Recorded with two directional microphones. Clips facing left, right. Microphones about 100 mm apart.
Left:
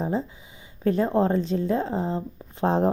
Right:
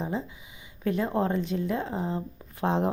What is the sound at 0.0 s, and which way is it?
A woman's voice, 35° left (ahead or behind).